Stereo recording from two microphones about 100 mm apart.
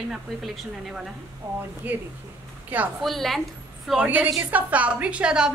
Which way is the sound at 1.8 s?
20° right (ahead or behind).